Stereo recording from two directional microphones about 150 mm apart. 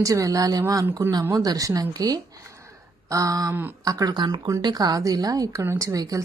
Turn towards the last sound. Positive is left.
turn(degrees=-25)  # may be behind; listen again after turning